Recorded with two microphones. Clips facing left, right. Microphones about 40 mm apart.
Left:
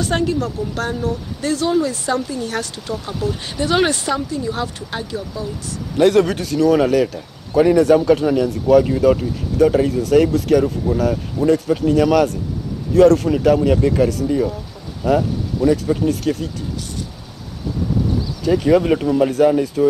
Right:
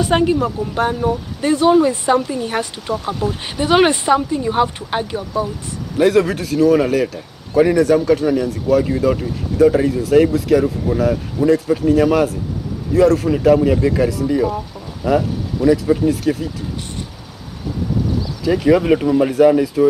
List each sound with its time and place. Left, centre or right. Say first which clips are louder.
0.0 s speech: right 4 dB; right
5.9 s a man's voice: even; centre
14.3 s speech: right 2 dB; right
15.0 s a man's voice: even; centre
18.5 s speech: right 1 dB; centre